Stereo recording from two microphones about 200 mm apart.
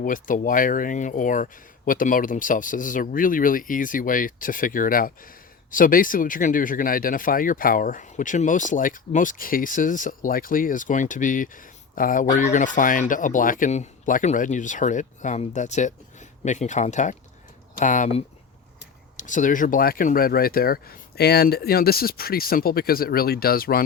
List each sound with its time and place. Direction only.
0.0 s speech: 40° left (ahead or behind)